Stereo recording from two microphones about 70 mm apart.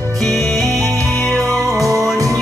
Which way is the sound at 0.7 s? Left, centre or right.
Right.